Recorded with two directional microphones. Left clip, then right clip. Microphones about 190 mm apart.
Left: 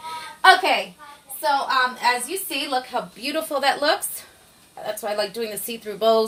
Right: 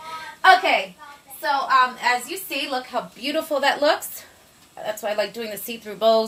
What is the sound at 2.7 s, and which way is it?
A woman's voice, centre (ahead or behind).